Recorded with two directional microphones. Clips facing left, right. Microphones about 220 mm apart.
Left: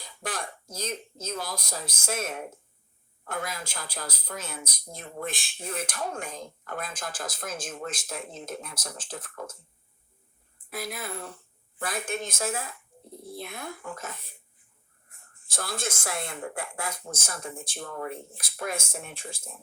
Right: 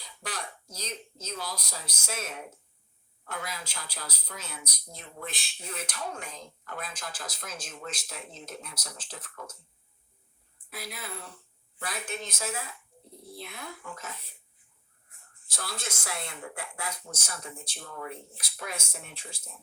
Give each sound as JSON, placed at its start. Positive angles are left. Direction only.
{"t": 0.0, "sound": "speech", "side_deg": 50}
{"t": 10.7, "sound": "speech", "side_deg": 50}